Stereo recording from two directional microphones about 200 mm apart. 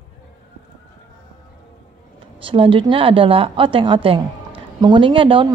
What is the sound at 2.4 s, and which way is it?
A woman's voice, 25° right (ahead or behind).